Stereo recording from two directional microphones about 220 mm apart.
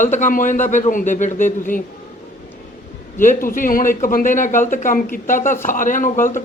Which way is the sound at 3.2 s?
40° left (ahead or behind).